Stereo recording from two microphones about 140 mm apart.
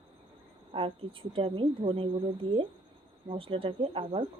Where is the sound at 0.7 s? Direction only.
40° right (ahead or behind).